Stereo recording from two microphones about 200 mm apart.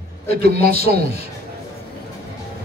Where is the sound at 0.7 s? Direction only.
50° right (ahead or behind).